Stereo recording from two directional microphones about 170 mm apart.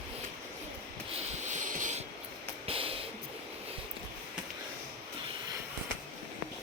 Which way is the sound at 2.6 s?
35° right (ahead or behind).